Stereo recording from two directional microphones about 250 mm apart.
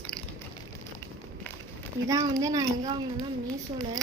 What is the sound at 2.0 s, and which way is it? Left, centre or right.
A child's voice, centre.